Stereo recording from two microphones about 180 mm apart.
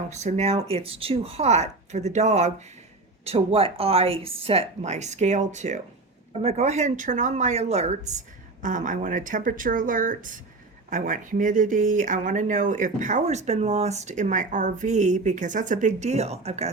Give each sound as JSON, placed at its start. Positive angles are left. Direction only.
{"t": 0.1, "sound": "a woman's voice", "side_deg": -40}